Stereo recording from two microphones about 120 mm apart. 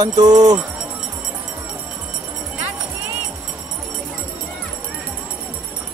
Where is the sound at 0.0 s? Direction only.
35° right (ahead or behind).